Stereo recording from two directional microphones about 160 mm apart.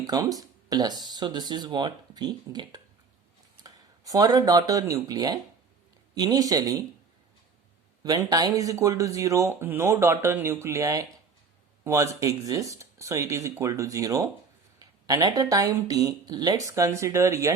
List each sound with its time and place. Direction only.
0.1 s speech: 20° right (ahead or behind)
8.0 s speech: 25° right (ahead or behind)